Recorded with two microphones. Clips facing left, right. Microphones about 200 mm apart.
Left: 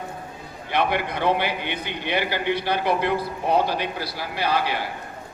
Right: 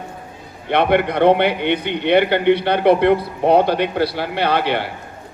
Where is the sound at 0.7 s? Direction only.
60° right (ahead or behind).